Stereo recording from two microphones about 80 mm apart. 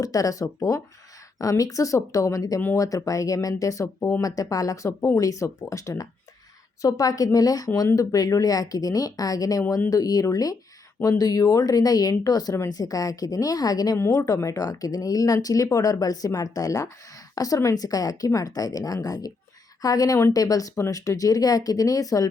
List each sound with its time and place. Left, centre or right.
0.0 s speech: left